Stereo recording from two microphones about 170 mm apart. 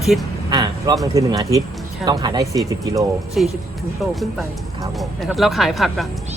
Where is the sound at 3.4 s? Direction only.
Centre (ahead or behind).